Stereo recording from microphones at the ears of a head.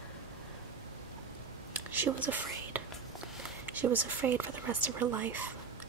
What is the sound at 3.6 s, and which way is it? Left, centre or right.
Speech, right.